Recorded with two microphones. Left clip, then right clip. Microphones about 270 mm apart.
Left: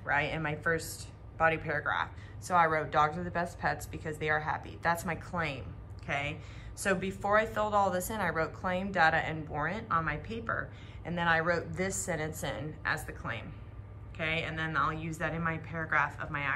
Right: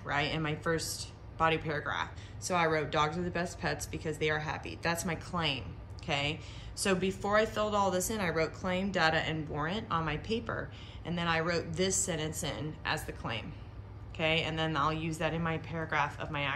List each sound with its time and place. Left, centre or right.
0.0 s speech: centre